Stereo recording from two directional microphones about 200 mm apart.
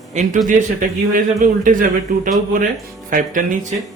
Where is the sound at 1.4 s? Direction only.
40° right (ahead or behind).